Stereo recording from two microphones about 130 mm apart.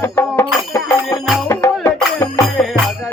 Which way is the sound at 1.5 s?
20° left (ahead or behind).